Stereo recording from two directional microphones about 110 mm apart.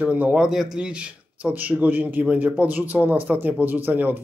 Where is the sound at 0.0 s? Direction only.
15° right (ahead or behind).